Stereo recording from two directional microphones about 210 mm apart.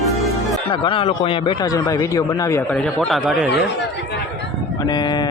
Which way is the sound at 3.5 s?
55° left (ahead or behind).